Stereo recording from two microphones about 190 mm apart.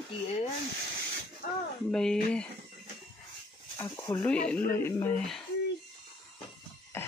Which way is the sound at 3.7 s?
15° left (ahead or behind).